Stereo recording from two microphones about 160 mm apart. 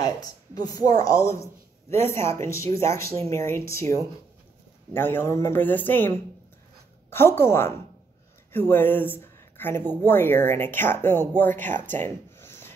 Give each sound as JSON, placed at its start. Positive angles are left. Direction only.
{"t": 0.6, "sound": "speech", "side_deg": 25}
{"t": 3.1, "sound": "speech", "side_deg": -40}
{"t": 3.3, "sound": "a woman's voice", "side_deg": 15}
{"t": 12.4, "sound": "wood", "side_deg": 15}